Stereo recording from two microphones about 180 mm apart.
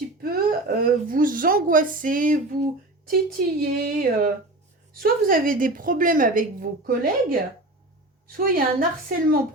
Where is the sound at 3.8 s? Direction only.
50° right (ahead or behind).